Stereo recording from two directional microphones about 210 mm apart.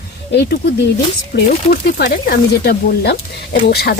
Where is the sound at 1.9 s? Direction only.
50° left (ahead or behind).